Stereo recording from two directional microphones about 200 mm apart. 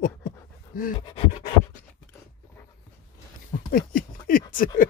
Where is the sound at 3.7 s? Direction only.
45° left (ahead or behind).